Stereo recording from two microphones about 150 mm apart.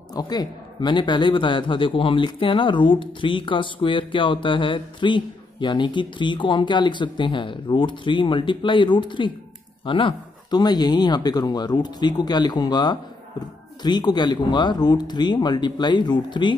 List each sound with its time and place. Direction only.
0.1 s speech: 25° left (ahead or behind)